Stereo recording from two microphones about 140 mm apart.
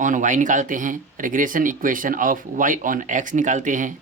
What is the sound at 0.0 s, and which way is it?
Speech, 65° right (ahead or behind).